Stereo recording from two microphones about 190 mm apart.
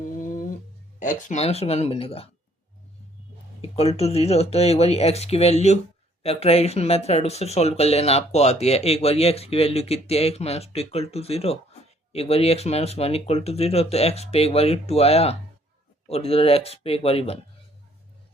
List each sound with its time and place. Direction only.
0.0 s a sound: 45° left (ahead or behind)
0.9 s speech: 45° left (ahead or behind)
3.6 s speech: 30° left (ahead or behind)